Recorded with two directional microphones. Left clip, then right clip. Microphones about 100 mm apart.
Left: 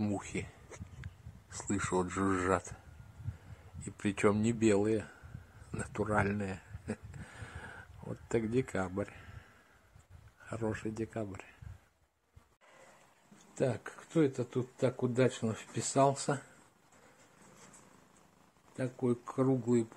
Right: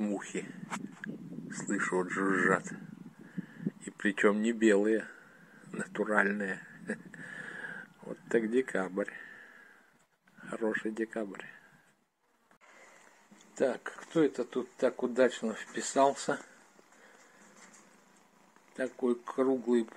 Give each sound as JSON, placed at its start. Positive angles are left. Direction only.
{"t": 0.2, "sound": "speech", "side_deg": 5}
{"t": 1.0, "sound": "speech", "side_deg": 20}
{"t": 3.8, "sound": "speech", "side_deg": 10}
{"t": 6.0, "sound": "a sound", "side_deg": 0}
{"t": 10.4, "sound": "speech", "side_deg": 0}
{"t": 13.6, "sound": "speech", "side_deg": 20}
{"t": 18.8, "sound": "speech", "side_deg": 20}